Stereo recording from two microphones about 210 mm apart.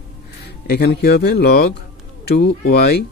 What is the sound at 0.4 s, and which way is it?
Speech, 50° left (ahead or behind).